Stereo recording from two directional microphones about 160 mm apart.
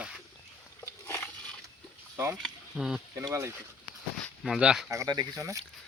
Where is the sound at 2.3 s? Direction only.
Centre (ahead or behind).